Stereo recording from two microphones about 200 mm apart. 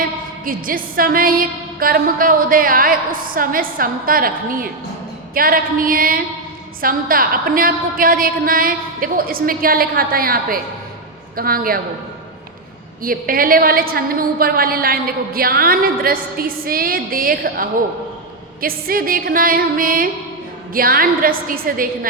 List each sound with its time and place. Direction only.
0.4 s a woman's voice: 45° right (ahead or behind)
13.0 s a woman's voice: 45° right (ahead or behind)